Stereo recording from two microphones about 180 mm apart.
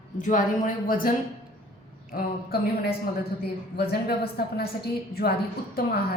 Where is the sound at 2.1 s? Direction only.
60° left (ahead or behind).